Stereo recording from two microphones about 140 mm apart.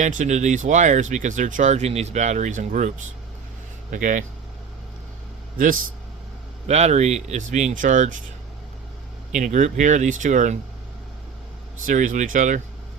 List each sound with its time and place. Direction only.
0.0 s speech: 60° right (ahead or behind)
3.9 s speech: 65° right (ahead or behind)
6.7 s speech: 50° right (ahead or behind)
9.3 s speech: 65° right (ahead or behind)
11.9 s speech: 65° right (ahead or behind)